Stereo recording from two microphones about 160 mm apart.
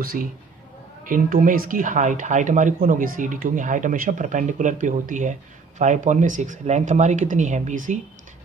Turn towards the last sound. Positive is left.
turn(degrees=-50)  # may be behind; listen again after turning